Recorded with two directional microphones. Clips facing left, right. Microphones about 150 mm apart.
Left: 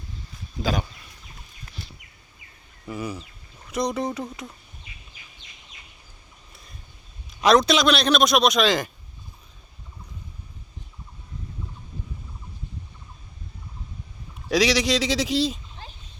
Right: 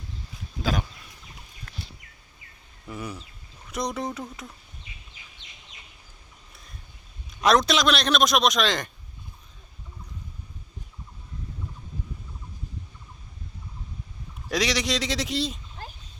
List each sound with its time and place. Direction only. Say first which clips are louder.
0.6 s a man's voice: left 2 dB; centre (ahead or behind)
2.8 s a man's voice: left 4 dB; centre (ahead or behind)
5.1 s chicken: left 1 dB; 20° right (ahead or behind)
7.4 s a man's voice: left 3 dB; centre (ahead or behind)
14.5 s speech: left 5 dB; centre (ahead or behind)